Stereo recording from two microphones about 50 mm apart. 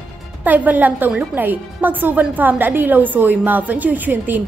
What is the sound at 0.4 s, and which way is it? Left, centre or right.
A woman's voice, right.